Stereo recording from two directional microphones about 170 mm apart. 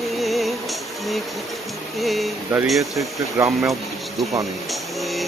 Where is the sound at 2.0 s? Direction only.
Centre (ahead or behind).